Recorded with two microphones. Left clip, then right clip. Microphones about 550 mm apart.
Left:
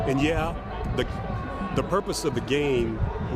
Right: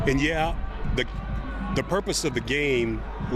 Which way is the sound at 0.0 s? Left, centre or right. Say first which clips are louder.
Right 1 dB; right.